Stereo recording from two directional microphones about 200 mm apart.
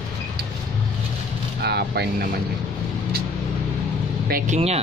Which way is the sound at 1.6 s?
55° right (ahead or behind).